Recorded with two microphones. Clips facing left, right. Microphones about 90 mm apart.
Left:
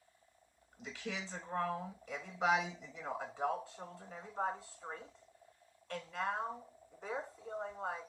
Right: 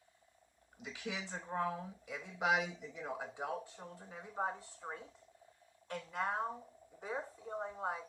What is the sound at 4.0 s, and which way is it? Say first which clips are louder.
A woman's voice: even; 10° right (ahead or behind).